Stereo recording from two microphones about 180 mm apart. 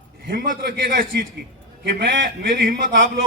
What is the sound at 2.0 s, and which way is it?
A man's voice, 70° right (ahead or behind).